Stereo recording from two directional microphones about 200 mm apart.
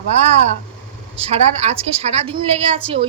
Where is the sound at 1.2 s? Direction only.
30° right (ahead or behind).